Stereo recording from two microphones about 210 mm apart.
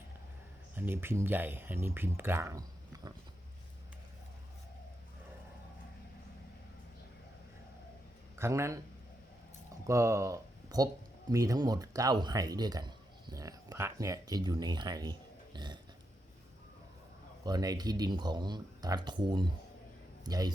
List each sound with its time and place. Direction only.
0.8 s speech: 10° right (ahead or behind)
8.4 s speech: 15° right (ahead or behind)
9.8 s speech: 15° right (ahead or behind)
15.5 s burping: 20° right (ahead or behind)
17.4 s speech: 20° right (ahead or behind)